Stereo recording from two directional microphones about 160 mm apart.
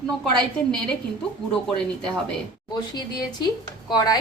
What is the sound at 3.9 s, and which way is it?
Speech, 25° left (ahead or behind).